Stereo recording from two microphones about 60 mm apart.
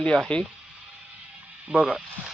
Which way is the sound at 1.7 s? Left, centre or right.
Centre.